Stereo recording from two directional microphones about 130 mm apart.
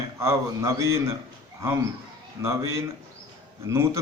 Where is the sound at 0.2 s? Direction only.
20° right (ahead or behind).